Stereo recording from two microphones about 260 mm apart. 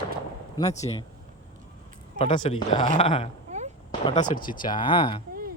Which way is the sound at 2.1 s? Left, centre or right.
Centre.